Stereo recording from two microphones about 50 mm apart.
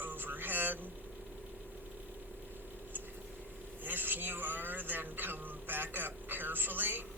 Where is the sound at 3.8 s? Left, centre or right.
Right.